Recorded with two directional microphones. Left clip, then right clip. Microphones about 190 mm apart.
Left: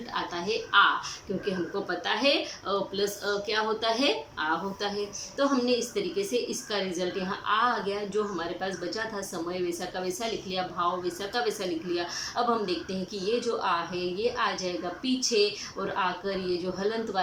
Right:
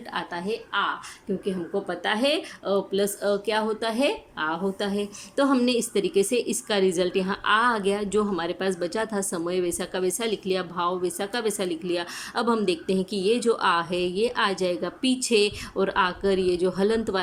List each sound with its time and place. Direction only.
0.1 s a woman's voice: 40° right (ahead or behind)